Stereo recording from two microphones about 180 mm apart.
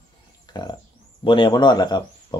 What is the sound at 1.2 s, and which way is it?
Speech, 25° left (ahead or behind).